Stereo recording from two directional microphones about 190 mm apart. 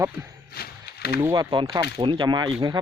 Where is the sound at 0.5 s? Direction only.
55° left (ahead or behind).